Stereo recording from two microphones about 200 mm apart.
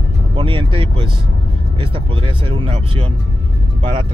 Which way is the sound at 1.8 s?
25° right (ahead or behind).